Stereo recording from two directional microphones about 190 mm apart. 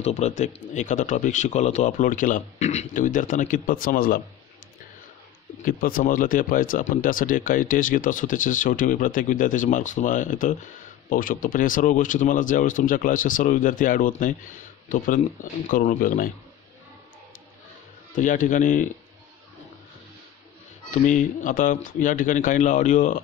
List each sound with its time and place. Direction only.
0.0 s speech: 35° left (ahead or behind)
5.7 s speech: 50° left (ahead or behind)
15.7 s speech: 45° left (ahead or behind)
18.1 s speech: 45° left (ahead or behind)
20.9 s speech: 40° left (ahead or behind)